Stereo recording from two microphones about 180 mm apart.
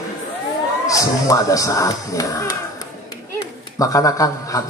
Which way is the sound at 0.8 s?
20° left (ahead or behind).